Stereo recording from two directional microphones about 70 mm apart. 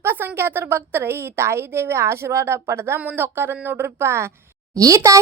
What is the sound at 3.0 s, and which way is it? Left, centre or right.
A woman's voice, right.